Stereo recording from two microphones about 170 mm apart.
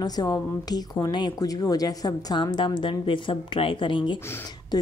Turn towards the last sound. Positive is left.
turn(degrees=20)  # may be behind; listen again after turning